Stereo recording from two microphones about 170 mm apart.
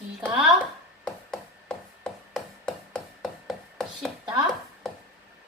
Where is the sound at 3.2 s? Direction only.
Centre (ahead or behind).